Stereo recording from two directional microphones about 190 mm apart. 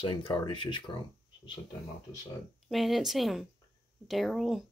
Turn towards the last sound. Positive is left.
turn(degrees=0)  # may be behind; listen again after turning